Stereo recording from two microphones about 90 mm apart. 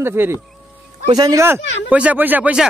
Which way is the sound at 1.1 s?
40° right (ahead or behind).